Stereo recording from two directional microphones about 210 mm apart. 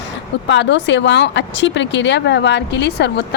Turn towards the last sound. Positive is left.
turn(degrees=55)  # may be behind; listen again after turning